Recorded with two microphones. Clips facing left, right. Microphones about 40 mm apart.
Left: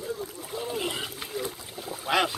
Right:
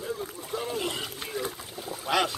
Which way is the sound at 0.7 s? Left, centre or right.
Centre.